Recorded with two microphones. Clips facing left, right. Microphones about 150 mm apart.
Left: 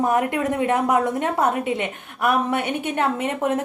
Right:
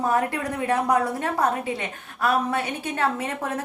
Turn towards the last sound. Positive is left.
turn(degrees=20)  # may be behind; listen again after turning